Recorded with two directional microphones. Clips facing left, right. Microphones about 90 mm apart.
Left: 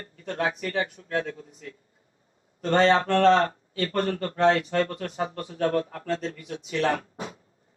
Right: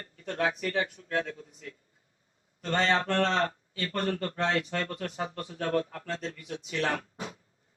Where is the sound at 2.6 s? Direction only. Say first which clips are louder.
Left 7 dB; 40° left (ahead or behind).